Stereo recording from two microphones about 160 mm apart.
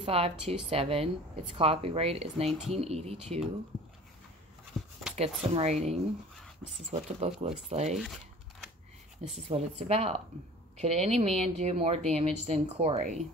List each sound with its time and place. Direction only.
0.0 s speech: 40° right (ahead or behind)
4.7 s a sound: 5° left (ahead or behind)
5.5 s speech: 40° right (ahead or behind)
9.2 s speech: 40° right (ahead or behind)